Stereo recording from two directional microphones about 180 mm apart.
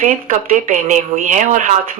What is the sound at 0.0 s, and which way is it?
Speech, 45° right (ahead or behind).